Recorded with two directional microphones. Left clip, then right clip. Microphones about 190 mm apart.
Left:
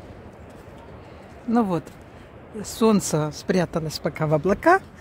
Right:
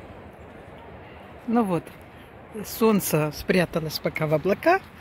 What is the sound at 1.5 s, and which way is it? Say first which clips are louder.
Speech: left 1 dB; centre (ahead or behind).